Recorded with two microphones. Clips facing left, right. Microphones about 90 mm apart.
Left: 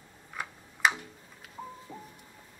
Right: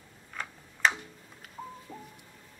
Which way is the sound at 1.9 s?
5° left (ahead or behind).